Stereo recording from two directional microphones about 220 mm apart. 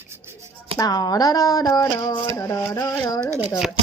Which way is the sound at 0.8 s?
15° left (ahead or behind).